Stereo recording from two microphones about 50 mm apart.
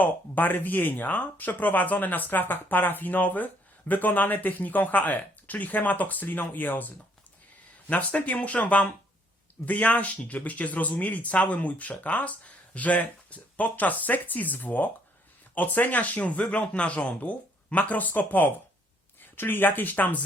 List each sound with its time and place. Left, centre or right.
0.0 s speech: left